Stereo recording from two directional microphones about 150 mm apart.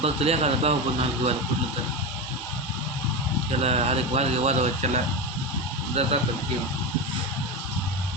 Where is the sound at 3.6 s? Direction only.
45° right (ahead or behind).